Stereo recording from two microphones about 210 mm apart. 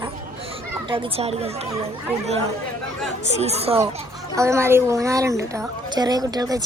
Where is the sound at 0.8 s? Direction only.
25° right (ahead or behind).